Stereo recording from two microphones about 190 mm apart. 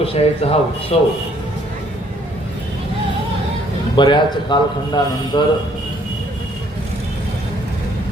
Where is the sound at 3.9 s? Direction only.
25° left (ahead or behind).